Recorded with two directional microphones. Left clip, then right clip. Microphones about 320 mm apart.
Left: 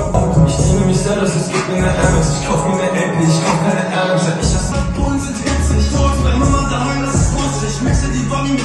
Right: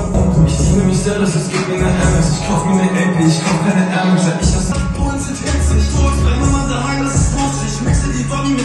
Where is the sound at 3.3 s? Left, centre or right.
Centre.